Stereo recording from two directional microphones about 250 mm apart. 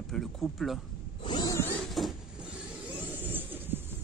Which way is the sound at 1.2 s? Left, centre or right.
Centre.